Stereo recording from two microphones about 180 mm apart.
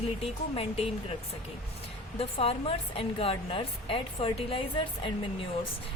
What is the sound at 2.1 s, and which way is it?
Speech, 30° left (ahead or behind).